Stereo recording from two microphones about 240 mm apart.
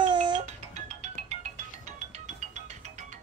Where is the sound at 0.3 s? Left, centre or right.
Right.